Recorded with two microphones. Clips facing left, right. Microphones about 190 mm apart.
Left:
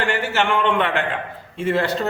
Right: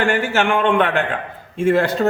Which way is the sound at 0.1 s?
50° right (ahead or behind).